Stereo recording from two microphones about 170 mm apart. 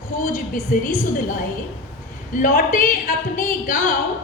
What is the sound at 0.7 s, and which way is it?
Speech, 50° left (ahead or behind).